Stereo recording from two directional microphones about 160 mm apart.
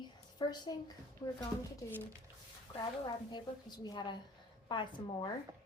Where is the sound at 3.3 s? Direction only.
25° left (ahead or behind).